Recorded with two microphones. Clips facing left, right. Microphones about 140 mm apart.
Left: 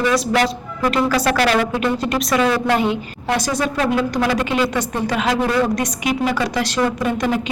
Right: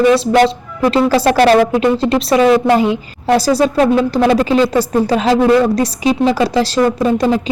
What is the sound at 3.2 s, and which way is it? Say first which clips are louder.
Speech: right 8 dB; 35° right (ahead or behind).